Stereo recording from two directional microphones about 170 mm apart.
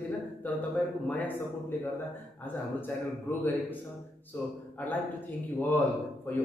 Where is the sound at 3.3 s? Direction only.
15° left (ahead or behind).